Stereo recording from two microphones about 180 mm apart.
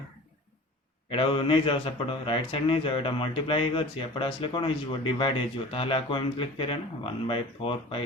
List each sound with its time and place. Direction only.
1.1 s a man's voice: 30° left (ahead or behind)